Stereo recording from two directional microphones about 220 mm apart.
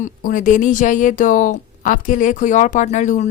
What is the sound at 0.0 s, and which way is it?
A woman's voice, 35° left (ahead or behind).